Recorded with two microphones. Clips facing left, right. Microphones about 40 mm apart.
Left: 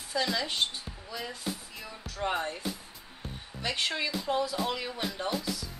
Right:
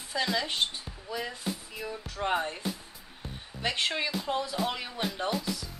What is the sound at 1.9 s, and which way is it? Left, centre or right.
Music, centre.